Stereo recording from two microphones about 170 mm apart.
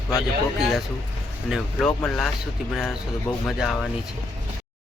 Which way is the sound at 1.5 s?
5° right (ahead or behind).